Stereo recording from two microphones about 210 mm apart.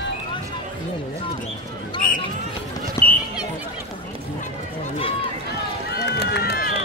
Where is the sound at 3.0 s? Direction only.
15° left (ahead or behind).